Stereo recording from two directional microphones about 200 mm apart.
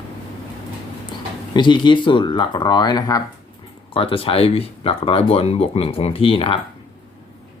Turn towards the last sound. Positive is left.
turn(degrees=25)  # may be behind; listen again after turning